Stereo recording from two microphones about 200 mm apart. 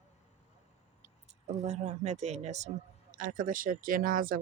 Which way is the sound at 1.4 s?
35° right (ahead or behind).